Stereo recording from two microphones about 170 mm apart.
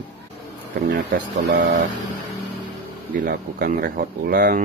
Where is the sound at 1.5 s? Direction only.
50° right (ahead or behind).